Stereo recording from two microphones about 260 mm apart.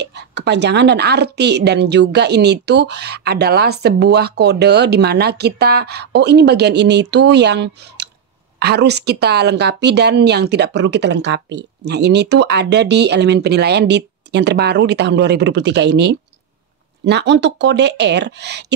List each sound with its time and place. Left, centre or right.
0.0 s a woman's voice: right